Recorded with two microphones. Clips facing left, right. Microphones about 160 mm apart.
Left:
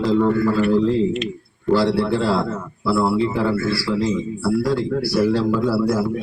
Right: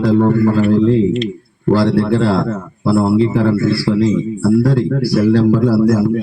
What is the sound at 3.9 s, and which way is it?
Speech, 30° right (ahead or behind).